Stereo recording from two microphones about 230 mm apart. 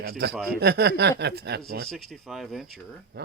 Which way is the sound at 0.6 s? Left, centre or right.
Right.